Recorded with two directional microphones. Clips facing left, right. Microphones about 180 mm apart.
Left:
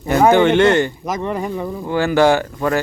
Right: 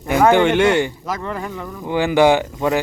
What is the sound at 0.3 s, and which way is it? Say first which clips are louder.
Speech: left 2 dB; 10° right (ahead or behind).